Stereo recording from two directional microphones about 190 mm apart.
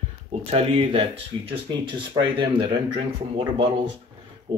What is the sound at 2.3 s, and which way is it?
Speech, 25° right (ahead or behind).